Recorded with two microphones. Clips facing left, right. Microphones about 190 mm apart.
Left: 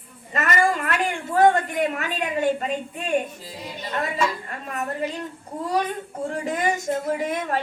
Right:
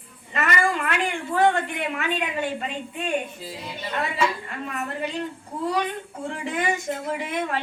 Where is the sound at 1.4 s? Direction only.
40° left (ahead or behind).